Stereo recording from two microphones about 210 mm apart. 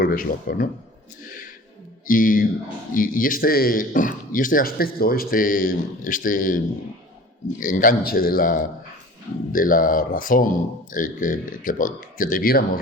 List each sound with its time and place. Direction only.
0.0 s speech: 45° left (ahead or behind)
2.0 s speech: 40° left (ahead or behind)
7.6 s speech: 40° left (ahead or behind)